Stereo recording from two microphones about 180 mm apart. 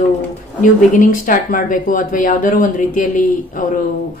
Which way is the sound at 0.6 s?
45° left (ahead or behind).